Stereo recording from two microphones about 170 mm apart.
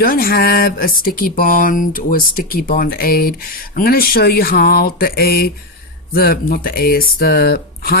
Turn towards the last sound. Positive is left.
turn(degrees=65)  # may be behind; listen again after turning